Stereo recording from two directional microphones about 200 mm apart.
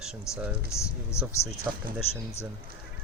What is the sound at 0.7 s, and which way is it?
Speech, 15° left (ahead or behind).